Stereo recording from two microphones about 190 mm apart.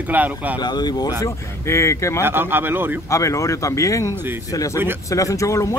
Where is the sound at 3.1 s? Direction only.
15° left (ahead or behind).